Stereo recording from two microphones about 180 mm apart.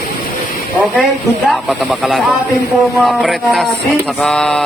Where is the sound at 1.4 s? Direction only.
Centre (ahead or behind).